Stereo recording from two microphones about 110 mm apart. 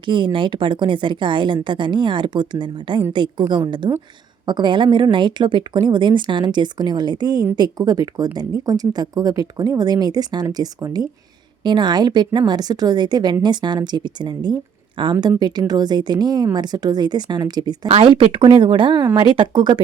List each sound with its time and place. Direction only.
0.0 s speech: 50° right (ahead or behind)
17.8 s speech: 65° right (ahead or behind)
18.1 s speech: 50° right (ahead or behind)